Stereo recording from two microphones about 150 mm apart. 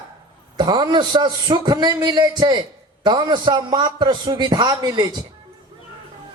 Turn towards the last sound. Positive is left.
turn(degrees=-30)  # may be behind; listen again after turning